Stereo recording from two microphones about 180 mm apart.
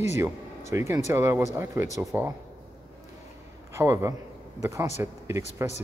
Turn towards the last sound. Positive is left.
turn(degrees=-15)  # may be behind; listen again after turning